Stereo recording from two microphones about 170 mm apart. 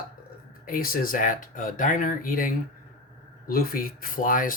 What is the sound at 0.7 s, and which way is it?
Speech, 55° left (ahead or behind).